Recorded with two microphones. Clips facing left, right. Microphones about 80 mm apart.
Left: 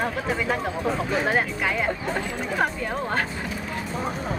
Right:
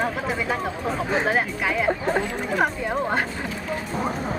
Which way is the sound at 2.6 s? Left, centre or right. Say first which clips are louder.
Right 2 dB; centre.